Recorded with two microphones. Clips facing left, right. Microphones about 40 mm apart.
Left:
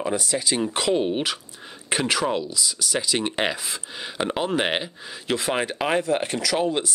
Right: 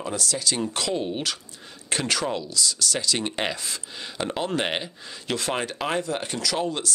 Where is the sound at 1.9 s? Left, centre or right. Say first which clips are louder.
Left 3 dB; centre.